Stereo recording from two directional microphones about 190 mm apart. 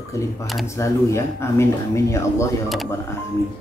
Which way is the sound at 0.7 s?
15° left (ahead or behind).